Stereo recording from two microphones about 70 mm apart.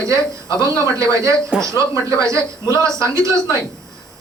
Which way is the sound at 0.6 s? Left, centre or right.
Right.